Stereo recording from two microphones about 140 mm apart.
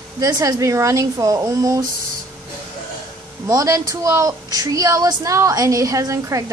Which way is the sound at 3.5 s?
25° right (ahead or behind).